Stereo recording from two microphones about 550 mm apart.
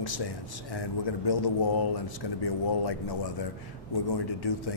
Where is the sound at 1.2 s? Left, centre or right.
Left.